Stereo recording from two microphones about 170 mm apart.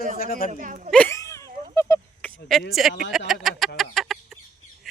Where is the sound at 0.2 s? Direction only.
55° left (ahead or behind).